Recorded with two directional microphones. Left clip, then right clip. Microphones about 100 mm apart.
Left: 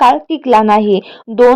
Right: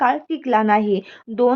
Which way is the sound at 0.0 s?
45° left (ahead or behind).